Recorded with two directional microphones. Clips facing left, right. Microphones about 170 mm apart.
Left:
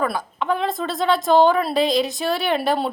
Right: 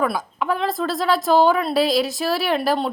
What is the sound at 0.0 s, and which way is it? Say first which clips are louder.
Speech: right 1 dB; 5° right (ahead or behind).